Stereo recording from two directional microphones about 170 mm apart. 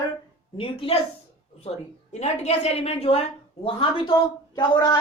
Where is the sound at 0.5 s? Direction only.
35° left (ahead or behind).